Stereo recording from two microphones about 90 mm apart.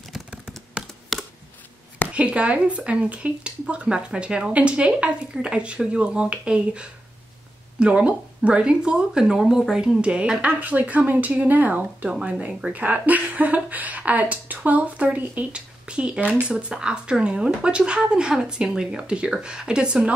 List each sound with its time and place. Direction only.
0.1 s typing: 5° right (ahead or behind)
2.1 s speech: 15° right (ahead or behind)